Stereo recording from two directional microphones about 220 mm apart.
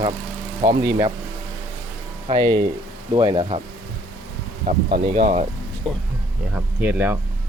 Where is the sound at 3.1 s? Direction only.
20° right (ahead or behind).